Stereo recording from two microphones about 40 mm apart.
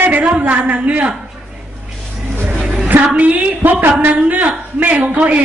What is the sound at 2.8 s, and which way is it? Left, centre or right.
A woman's voice, right.